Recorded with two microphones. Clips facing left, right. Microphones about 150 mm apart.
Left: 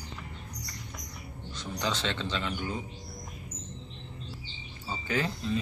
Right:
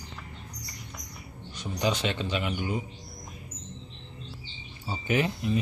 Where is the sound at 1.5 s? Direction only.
15° right (ahead or behind).